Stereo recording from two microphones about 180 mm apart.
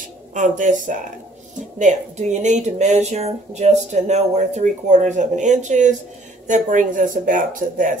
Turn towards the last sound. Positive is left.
turn(degrees=-45)  # may be behind; listen again after turning